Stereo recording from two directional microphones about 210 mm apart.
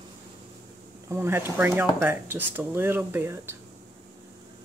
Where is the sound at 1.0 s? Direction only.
10° right (ahead or behind).